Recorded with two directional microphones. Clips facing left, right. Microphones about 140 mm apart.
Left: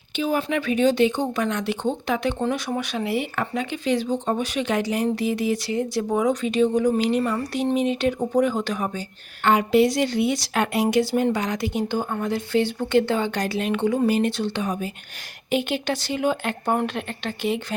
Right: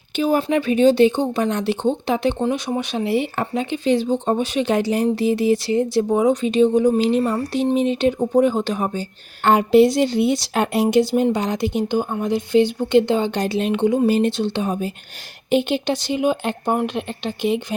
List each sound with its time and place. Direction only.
0.2 s speech: 35° right (ahead or behind); by 17.7 s 20° right (ahead or behind)